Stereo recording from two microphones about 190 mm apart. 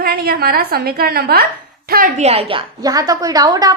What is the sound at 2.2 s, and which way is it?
A woman's voice, 30° right (ahead or behind).